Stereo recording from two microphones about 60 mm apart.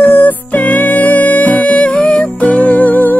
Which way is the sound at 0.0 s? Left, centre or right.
Left.